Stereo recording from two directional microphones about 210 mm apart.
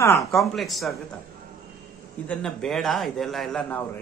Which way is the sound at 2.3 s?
5° left (ahead or behind).